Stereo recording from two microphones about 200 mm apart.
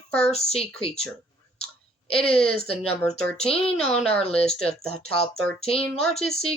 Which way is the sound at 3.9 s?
5° left (ahead or behind).